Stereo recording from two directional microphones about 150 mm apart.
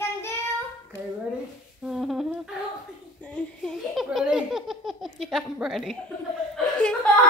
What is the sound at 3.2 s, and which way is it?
Laughter, 5° left (ahead or behind).